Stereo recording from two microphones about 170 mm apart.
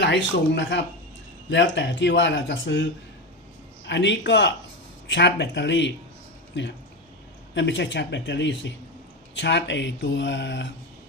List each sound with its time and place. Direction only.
0.0 s speech: 90° left
3.8 s speech: 90° left